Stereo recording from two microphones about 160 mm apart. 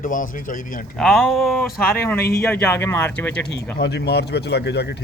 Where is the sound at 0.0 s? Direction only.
55° left (ahead or behind).